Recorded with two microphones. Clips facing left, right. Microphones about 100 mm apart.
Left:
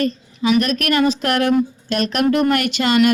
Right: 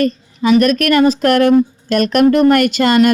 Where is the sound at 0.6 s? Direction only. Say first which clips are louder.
Right 6 dB; 50° right (ahead or behind).